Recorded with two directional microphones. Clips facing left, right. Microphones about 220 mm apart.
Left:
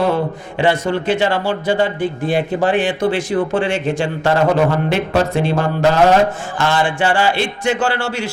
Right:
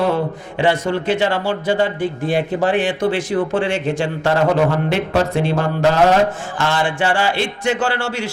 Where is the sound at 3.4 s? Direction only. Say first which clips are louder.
Left 1 dB; 15° left (ahead or behind).